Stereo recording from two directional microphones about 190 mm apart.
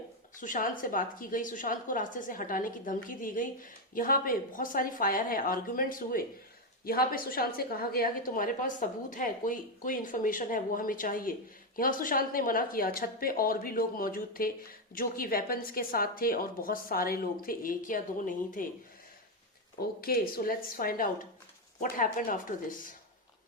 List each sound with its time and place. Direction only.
0.3 s a woman's voice: 45° left (ahead or behind)
20.0 s a woman's voice: 50° left (ahead or behind)